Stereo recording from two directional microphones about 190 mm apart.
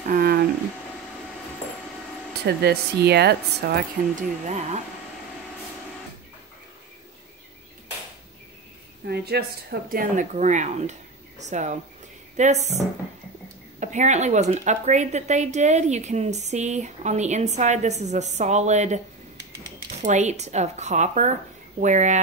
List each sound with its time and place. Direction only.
0.0 s a sound: 50° right (ahead or behind)
2.4 s speech: 60° right (ahead or behind)
9.0 s a woman's voice: 60° right (ahead or behind); by 18.9 s 35° right (ahead or behind)
20.0 s a woman's voice: 35° right (ahead or behind)